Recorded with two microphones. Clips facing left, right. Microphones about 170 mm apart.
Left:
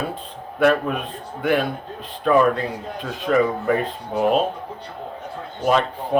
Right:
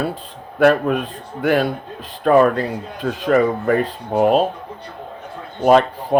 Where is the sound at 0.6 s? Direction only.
45° right (ahead or behind).